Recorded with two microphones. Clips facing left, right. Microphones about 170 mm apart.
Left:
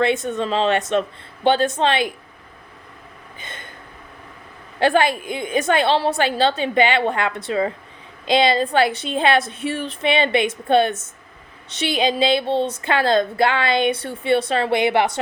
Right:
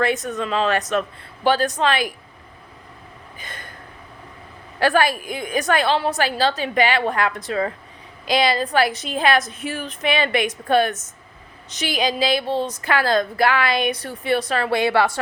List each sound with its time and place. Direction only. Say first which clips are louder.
0.0 s a woman's voice: left 2 dB; 25° left (ahead or behind)
3.3 s gasp: left 1 dB; 25° left (ahead or behind)
4.8 s a woman's voice: left 1 dB; 25° left (ahead or behind)